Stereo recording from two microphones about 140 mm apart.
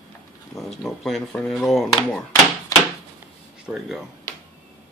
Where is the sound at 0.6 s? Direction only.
Centre (ahead or behind).